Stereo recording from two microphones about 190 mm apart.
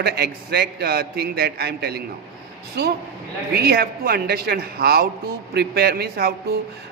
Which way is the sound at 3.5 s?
55° right (ahead or behind).